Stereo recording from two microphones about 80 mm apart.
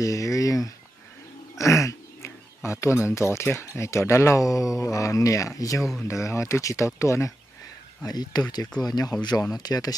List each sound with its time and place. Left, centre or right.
0.0 s a sound: left
3.5 s speech: left
8.0 s speech: left